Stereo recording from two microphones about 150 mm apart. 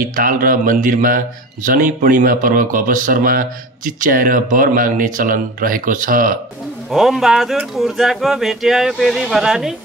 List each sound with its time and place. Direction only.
0.0 s speech: 70° right (ahead or behind)
6.9 s speech: centre (ahead or behind)